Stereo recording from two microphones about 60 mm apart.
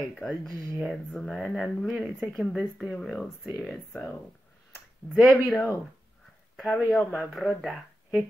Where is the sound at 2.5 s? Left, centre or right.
Centre.